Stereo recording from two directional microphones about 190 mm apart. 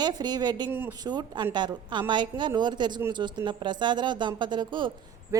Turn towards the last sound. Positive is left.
turn(degrees=-25)  # may be behind; listen again after turning